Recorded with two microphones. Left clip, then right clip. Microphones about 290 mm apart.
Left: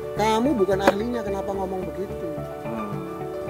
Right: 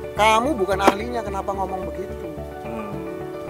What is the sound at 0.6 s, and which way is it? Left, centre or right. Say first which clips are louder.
Speech: right 2 dB; right.